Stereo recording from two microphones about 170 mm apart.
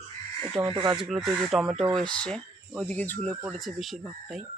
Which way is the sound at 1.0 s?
Centre (ahead or behind).